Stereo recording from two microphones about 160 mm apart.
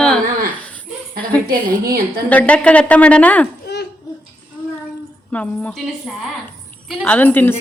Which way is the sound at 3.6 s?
90° left.